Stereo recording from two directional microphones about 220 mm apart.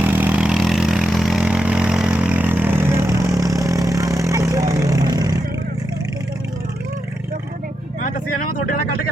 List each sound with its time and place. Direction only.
0.0 s vehicle: 10° right (ahead or behind)
8.0 s vehicle: 40° left (ahead or behind)